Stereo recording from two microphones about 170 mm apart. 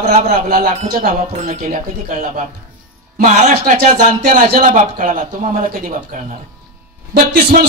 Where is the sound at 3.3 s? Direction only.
50° right (ahead or behind).